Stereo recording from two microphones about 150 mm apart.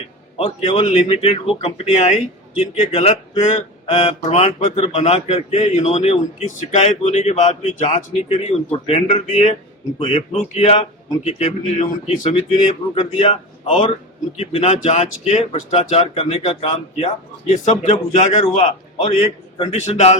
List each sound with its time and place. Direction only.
0.3 s a man's voice: 45° left (ahead or behind)
19.7 s a man's voice: 50° left (ahead or behind)